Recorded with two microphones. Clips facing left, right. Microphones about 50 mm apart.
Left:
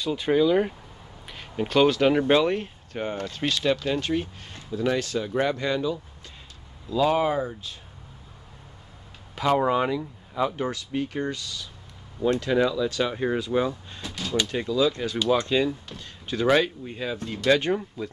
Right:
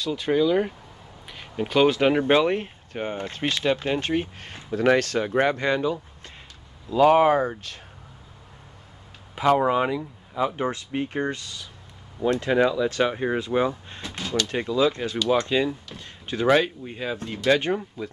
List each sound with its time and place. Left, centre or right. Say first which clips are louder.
0.0 s speech: even; centre
1.2 s a sound: even; centre
1.9 s speech: even; right
3.3 s speech: right 1 dB; right
4.6 s speech: right 5 dB; right
9.5 s speech: right 2 dB; centre
10.5 s speech: right 1 dB; right
13.1 s speech: even; centre
13.4 s speech: right 1 dB; right
15.4 s speech: even; centre
16.0 s speech: right 1 dB; right
16.4 s speech: right 1 dB; centre